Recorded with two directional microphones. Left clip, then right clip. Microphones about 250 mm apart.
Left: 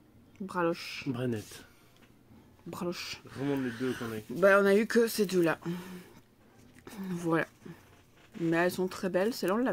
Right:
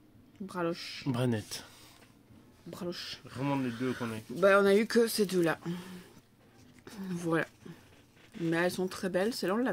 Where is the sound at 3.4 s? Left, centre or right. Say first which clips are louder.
Even; right.